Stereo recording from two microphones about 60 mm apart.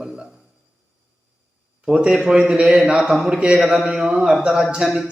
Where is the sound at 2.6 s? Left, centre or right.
Centre.